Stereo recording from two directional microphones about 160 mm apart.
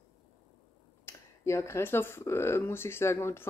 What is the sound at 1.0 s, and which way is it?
Speech, 20° left (ahead or behind).